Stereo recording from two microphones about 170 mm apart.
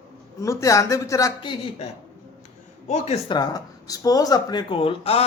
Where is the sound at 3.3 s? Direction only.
25° left (ahead or behind).